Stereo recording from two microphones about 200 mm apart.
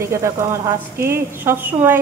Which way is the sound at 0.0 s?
15° right (ahead or behind).